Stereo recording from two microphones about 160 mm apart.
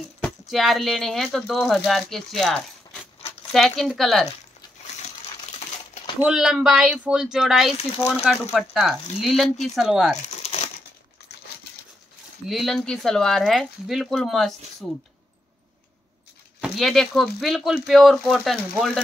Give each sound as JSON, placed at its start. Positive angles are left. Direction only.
{"t": 0.2, "sound": "speech", "side_deg": 0}
{"t": 6.1, "sound": "speech", "side_deg": -5}
{"t": 10.4, "sound": "crushing", "side_deg": 40}
{"t": 12.4, "sound": "speech", "side_deg": 0}
{"t": 16.6, "sound": "speech", "side_deg": 0}